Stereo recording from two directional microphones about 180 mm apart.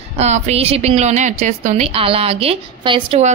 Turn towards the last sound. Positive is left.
turn(degrees=-30)  # may be behind; listen again after turning